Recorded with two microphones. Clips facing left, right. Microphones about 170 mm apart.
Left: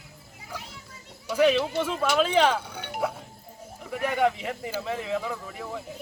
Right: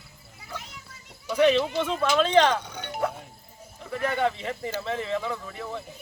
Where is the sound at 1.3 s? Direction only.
5° left (ahead or behind).